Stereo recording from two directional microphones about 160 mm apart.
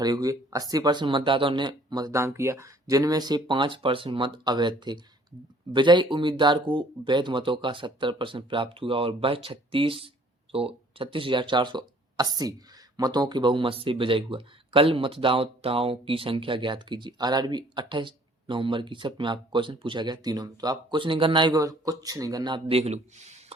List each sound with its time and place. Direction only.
0.0 s speech: 25° right (ahead or behind)
22.6 s speech: 40° right (ahead or behind)